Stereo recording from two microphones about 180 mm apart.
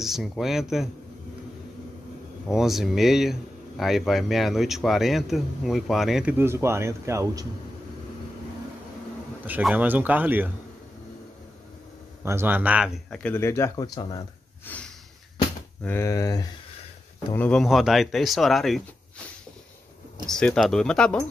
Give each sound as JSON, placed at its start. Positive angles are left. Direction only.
{"t": 0.0, "sound": "speech", "side_deg": 0}
{"t": 2.4, "sound": "speech", "side_deg": 0}
{"t": 9.5, "sound": "speech", "side_deg": -5}
{"t": 12.3, "sound": "speech", "side_deg": -10}
{"t": 14.7, "sound": "speech", "side_deg": 10}
{"t": 17.3, "sound": "speech", "side_deg": 5}
{"t": 20.2, "sound": "speech", "side_deg": 5}